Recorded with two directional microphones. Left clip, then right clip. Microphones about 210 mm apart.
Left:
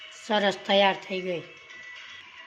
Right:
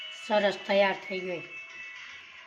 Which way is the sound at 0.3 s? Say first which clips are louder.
Left 2 dB; 20° left (ahead or behind).